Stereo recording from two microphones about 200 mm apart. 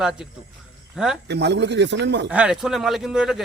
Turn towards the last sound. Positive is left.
turn(degrees=-5)  # may be behind; listen again after turning